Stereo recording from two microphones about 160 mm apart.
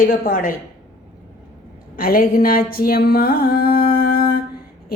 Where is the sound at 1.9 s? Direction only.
65° left (ahead or behind).